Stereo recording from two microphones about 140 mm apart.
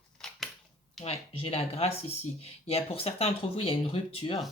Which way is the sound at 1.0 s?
45° left (ahead or behind).